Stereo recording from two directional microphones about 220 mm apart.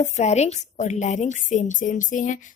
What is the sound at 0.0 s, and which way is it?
A woman's voice, 30° left (ahead or behind).